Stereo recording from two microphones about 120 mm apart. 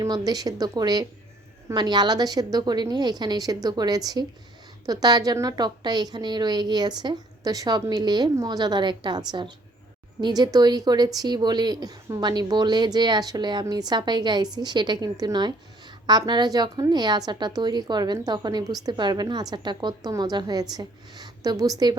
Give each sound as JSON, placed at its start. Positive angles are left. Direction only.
{"t": 0.0, "sound": "a woman's voice", "side_deg": -30}